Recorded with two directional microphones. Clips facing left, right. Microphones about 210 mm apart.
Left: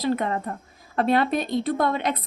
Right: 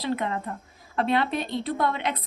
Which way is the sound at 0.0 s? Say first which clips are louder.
Left 4 dB; 45° left (ahead or behind).